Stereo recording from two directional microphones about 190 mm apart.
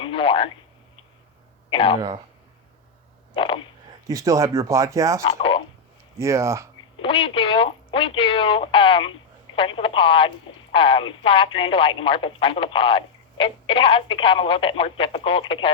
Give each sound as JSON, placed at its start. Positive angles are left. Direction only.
{"t": 0.0, "sound": "speech", "side_deg": 25}
{"t": 1.7, "sound": "speech", "side_deg": 30}
{"t": 3.3, "sound": "a sound", "side_deg": 30}
{"t": 4.0, "sound": "speech", "side_deg": -20}
{"t": 5.2, "sound": "speech", "side_deg": 30}
{"t": 6.1, "sound": "speech", "side_deg": -15}
{"t": 7.0, "sound": "speech", "side_deg": 30}